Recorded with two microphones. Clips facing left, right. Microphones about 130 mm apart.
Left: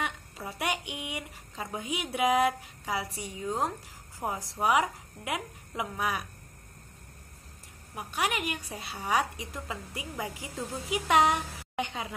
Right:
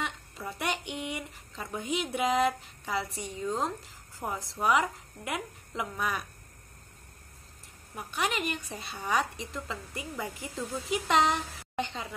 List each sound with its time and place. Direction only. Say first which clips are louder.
0.0 s a woman's voice: left 1 dB; 15° left (ahead or behind)
7.9 s a woman's voice: left 1 dB; 15° left (ahead or behind)